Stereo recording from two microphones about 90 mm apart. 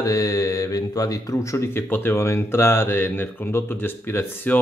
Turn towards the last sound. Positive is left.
turn(degrees=25)  # may be behind; listen again after turning